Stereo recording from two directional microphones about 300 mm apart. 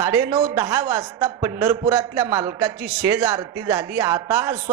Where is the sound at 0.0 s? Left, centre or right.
Centre.